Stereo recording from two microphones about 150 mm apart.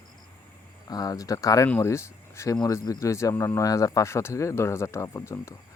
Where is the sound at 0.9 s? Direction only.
25° left (ahead or behind).